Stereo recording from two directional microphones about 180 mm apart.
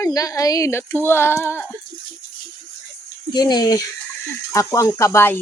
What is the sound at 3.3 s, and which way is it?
Speech, 20° left (ahead or behind).